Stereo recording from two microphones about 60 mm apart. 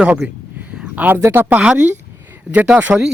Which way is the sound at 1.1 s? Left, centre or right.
Right.